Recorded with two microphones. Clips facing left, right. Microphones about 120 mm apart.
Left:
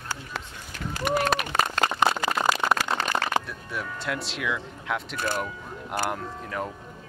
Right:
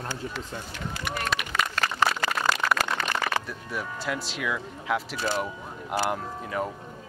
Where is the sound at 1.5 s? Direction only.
25° left (ahead or behind).